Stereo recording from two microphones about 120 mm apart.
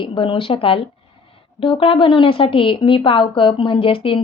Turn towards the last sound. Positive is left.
turn(degrees=50)  # may be behind; listen again after turning